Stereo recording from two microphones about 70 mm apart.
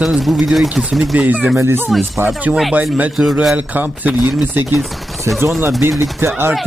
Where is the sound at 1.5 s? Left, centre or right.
Right.